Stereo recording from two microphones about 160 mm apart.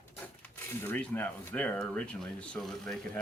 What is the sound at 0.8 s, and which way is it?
Speech, 15° left (ahead or behind).